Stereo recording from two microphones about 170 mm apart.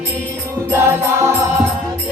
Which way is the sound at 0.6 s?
15° right (ahead or behind).